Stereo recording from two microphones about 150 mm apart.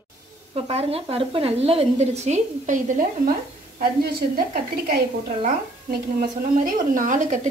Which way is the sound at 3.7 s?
75° right (ahead or behind).